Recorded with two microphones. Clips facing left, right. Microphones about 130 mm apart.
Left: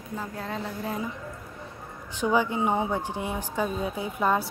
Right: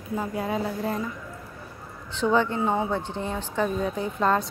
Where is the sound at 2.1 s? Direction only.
10° left (ahead or behind).